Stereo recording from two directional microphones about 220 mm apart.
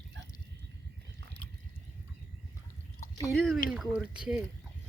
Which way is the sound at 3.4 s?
Centre (ahead or behind).